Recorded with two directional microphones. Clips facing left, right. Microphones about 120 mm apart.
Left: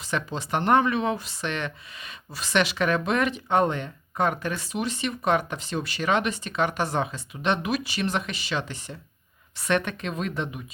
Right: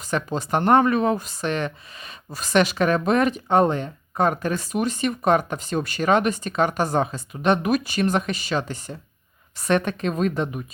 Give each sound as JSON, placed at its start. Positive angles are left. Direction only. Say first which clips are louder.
{"t": 0.0, "sound": "speech", "louder": "right 4 dB", "side_deg": -45}